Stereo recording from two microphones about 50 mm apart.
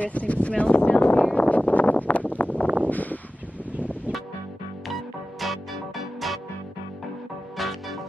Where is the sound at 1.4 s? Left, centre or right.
Left.